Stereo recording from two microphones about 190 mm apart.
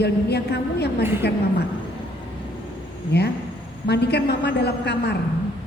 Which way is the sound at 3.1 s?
60° left (ahead or behind).